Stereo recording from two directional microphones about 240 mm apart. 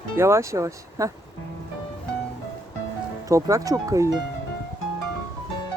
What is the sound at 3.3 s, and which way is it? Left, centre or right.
Speech, centre.